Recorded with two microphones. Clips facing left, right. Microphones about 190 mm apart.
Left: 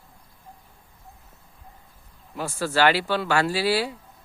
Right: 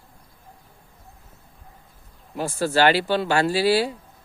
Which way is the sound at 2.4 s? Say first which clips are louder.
Right 2 dB; 25° right (ahead or behind).